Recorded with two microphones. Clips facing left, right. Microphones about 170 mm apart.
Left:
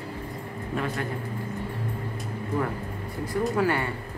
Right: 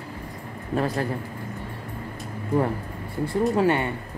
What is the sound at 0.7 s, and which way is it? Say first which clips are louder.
Speech: right 5 dB; 35° right (ahead or behind).